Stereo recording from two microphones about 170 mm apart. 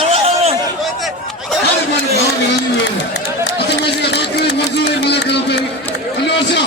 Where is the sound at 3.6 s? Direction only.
75° left (ahead or behind).